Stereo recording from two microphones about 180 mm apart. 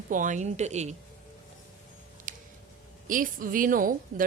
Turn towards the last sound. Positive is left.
turn(degrees=-50)  # may be behind; listen again after turning